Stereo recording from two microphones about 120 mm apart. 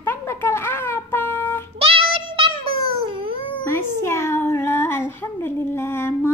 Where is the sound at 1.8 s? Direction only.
50° right (ahead or behind).